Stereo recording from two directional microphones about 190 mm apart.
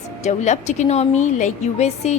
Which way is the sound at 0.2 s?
40° left (ahead or behind).